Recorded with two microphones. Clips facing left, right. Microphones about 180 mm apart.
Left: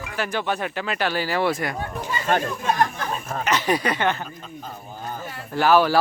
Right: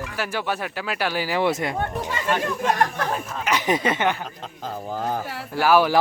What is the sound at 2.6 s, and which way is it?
Speech, 70° right (ahead or behind).